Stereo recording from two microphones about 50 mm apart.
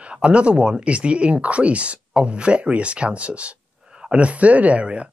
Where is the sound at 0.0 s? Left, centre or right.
Right.